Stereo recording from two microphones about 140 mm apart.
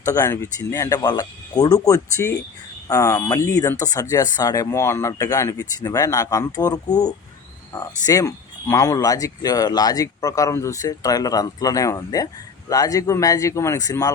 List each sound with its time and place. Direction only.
0.0 s speech: 25° left (ahead or behind)